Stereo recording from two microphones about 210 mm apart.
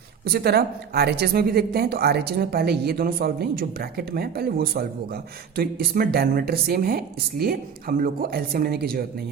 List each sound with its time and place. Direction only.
0.3 s a woman's voice: 50° right (ahead or behind)